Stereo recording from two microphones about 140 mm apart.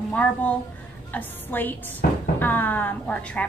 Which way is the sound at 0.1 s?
10° left (ahead or behind).